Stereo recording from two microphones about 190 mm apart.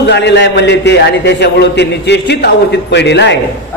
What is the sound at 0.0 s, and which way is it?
A man's voice, 65° left (ahead or behind).